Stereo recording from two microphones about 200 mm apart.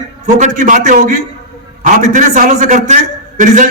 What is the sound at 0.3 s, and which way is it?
A man's voice, 35° right (ahead or behind).